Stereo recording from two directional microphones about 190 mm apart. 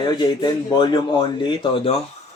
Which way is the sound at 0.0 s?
25° left (ahead or behind).